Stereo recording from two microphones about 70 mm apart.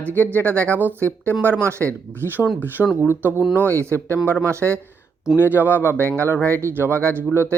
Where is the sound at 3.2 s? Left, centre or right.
Right.